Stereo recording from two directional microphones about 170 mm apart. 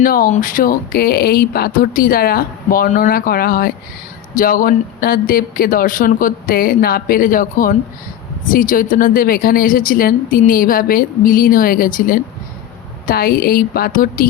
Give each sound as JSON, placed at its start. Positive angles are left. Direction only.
{"t": 0.0, "sound": "a woman's voice", "side_deg": 55}